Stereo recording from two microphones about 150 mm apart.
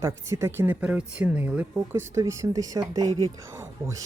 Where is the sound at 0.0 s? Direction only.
20° right (ahead or behind).